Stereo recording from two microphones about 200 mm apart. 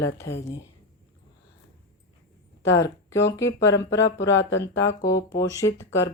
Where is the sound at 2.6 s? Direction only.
15° left (ahead or behind).